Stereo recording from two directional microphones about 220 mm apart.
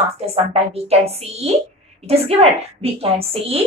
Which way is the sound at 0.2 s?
30° right (ahead or behind).